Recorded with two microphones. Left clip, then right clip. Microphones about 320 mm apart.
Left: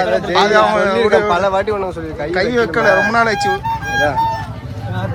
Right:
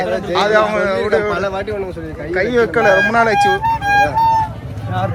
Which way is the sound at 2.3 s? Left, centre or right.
Centre.